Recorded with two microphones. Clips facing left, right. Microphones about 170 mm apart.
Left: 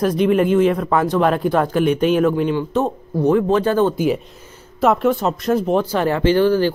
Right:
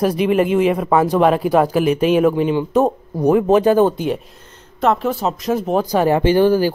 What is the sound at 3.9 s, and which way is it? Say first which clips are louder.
Speech: left 3 dB; 5° left (ahead or behind).